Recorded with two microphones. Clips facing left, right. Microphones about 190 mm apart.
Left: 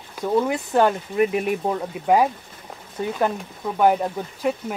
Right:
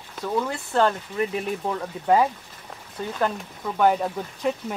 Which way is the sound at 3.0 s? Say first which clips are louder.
Left 3 dB; 10° left (ahead or behind).